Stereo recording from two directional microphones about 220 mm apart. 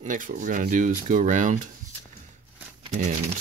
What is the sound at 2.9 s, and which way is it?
Speech, 35° right (ahead or behind).